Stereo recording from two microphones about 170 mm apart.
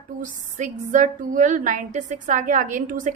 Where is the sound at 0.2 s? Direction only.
45° right (ahead or behind).